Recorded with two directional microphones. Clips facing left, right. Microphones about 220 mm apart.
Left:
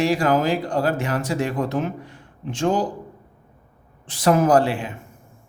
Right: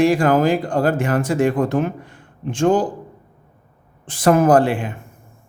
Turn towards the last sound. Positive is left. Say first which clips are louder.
# right 3 dB
turn(degrees=-50)  # may be behind; listen again after turning